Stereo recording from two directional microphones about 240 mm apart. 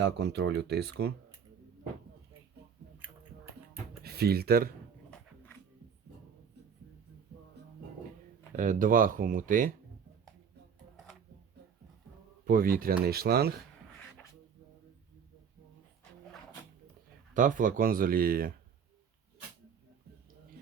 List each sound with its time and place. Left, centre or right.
0.0 s speech: right
4.0 s speech: right
8.5 s speech: right
10.9 s a sound: centre
12.5 s speech: right
17.3 s speech: right